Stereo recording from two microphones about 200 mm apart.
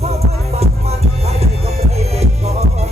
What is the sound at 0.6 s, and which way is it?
Music, 30° right (ahead or behind).